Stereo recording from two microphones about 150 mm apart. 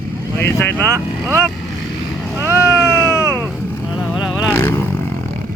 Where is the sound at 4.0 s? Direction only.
Centre (ahead or behind).